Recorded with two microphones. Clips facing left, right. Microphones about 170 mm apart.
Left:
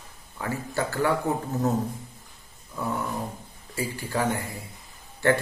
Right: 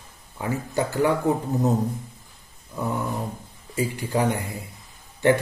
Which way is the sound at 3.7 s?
20° right (ahead or behind).